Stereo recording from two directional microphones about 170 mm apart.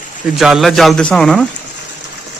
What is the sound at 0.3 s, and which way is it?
A man's voice, centre (ahead or behind).